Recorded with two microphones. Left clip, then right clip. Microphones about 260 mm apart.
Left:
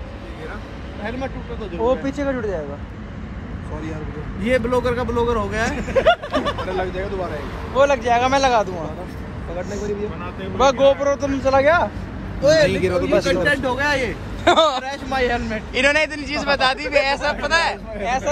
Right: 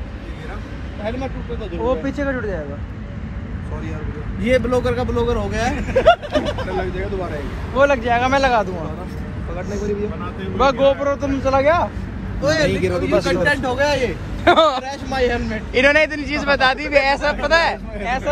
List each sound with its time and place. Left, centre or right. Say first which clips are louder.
1.9 s speech: even; left
2.2 s speech: left 2 dB; left
4.4 s a man's voice: right 2 dB; centre
6.8 s speech: even; left
7.8 s speech: even; left
9.6 s speech: right 1 dB; left
10.6 s speech: even; left
12.4 s speech: left 4 dB; right
13.1 s speech: right 1 dB; left
13.7 s a man's voice: right 2 dB; centre